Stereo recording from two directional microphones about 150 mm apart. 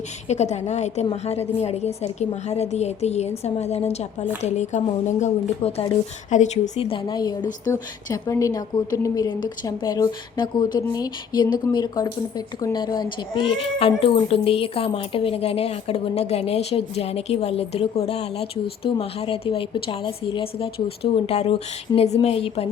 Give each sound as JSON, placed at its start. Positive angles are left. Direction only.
{"t": 0.3, "sound": "a woman's voice", "side_deg": 50}
{"t": 6.7, "sound": "a woman's voice", "side_deg": 35}